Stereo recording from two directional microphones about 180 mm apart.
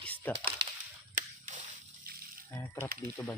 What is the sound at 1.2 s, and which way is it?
Whip, 45° right (ahead or behind).